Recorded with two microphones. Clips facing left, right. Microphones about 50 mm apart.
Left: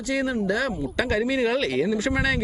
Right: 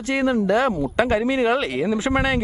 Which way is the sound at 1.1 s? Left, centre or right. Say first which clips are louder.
Right 1 dB; right.